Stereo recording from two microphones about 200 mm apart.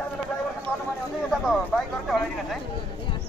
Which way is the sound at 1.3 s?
Centre (ahead or behind).